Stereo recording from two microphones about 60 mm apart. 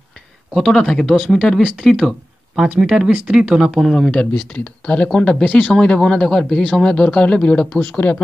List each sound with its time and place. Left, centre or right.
0.7 s speech: centre
2.0 s speech: centre
3.9 s speech: centre